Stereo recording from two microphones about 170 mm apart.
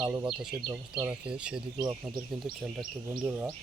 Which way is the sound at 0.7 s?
10° right (ahead or behind).